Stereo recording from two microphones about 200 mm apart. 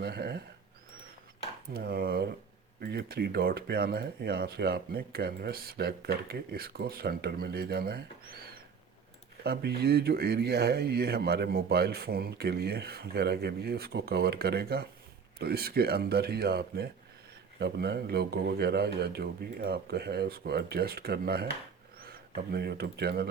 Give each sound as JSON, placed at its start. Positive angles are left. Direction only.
{"t": 0.0, "sound": "speech", "side_deg": -50}
{"t": 1.7, "sound": "speech", "side_deg": -50}